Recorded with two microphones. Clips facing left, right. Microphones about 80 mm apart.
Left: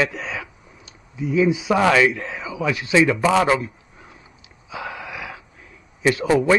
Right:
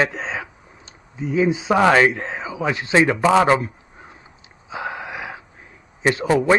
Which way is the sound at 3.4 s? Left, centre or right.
Right.